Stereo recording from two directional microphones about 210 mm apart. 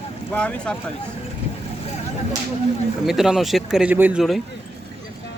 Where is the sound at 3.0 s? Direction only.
Centre (ahead or behind).